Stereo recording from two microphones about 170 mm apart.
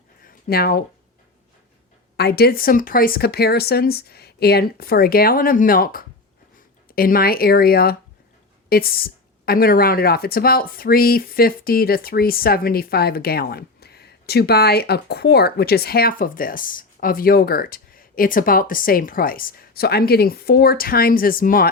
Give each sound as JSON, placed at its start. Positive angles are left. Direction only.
{"t": 0.3, "sound": "speech", "side_deg": 60}
{"t": 2.1, "sound": "a woman's voice", "side_deg": 70}